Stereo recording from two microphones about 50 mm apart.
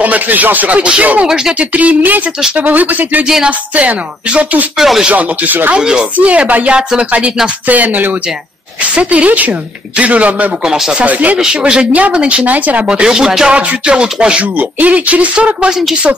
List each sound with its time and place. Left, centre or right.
0.0 s speech: right
1.2 s speech: centre
1.6 s speech: right
4.7 s speech: centre
5.1 s speech: right
5.8 s speech: centre
6.1 s speech: right
10.6 s speech: centre
11.0 s speech: right
11.6 s speech: centre
12.4 s speech: right
12.8 s speech: centre
14.6 s speech: right